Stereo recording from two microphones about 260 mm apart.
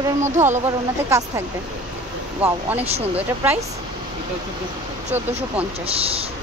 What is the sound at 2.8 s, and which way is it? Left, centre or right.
Speech, right.